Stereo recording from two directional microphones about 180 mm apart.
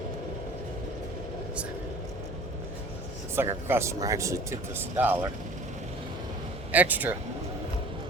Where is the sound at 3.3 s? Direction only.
15° right (ahead or behind).